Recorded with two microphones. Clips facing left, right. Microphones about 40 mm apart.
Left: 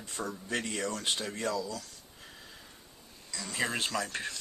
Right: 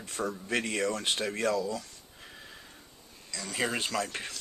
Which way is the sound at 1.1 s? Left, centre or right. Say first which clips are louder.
Right 4 dB; right.